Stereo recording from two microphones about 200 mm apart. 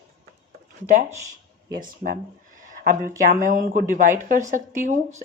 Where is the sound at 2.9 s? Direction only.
40° right (ahead or behind).